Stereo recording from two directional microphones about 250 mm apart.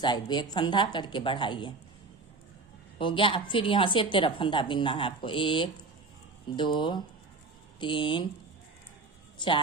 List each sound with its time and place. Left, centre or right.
0.0 s speech: centre
3.0 s a woman's voice: left